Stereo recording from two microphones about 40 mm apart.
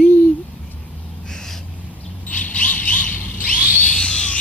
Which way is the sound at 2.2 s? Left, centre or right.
Left.